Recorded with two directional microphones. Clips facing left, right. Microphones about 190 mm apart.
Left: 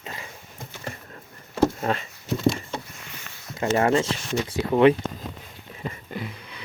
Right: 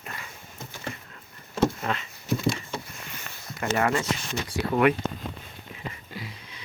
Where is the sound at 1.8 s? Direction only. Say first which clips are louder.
Left 4 dB; 40° left (ahead or behind).